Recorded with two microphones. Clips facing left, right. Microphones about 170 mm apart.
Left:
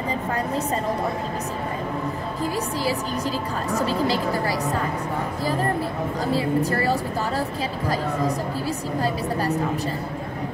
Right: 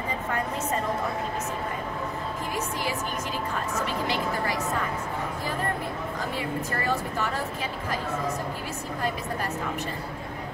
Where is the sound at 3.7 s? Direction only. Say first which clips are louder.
Left 8 dB; 35° left (ahead or behind).